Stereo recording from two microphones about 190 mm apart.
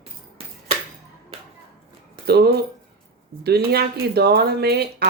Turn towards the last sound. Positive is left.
turn(degrees=-60)  # may be behind; listen again after turning